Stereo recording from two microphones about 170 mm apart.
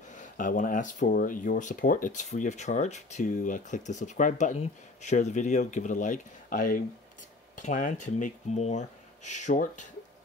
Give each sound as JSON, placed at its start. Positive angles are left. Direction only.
{"t": 0.1, "sound": "speech", "side_deg": 50}